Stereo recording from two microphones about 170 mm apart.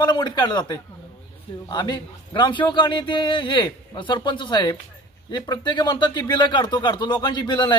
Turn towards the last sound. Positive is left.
turn(degrees=25)  # may be behind; listen again after turning